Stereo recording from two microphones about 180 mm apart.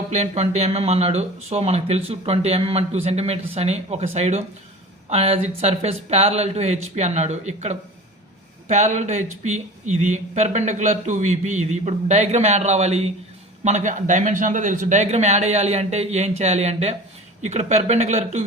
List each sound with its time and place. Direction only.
0.1 s speech: 40° right (ahead or behind)